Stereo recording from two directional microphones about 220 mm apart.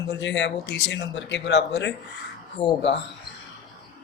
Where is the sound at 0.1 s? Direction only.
55° left (ahead or behind).